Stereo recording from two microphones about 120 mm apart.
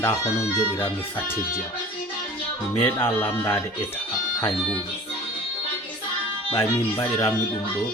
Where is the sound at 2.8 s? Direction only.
20° left (ahead or behind).